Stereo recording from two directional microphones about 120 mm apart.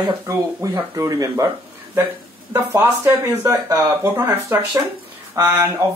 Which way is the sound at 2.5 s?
20° right (ahead or behind).